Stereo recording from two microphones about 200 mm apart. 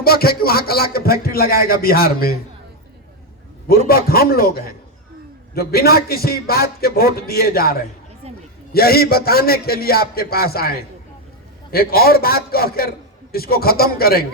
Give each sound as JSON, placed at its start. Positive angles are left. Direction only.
{"t": 0.0, "sound": "speech", "side_deg": 50}
{"t": 3.8, "sound": "speech", "side_deg": 50}